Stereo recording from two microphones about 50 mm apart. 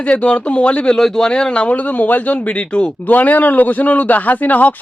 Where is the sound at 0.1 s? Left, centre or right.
Left.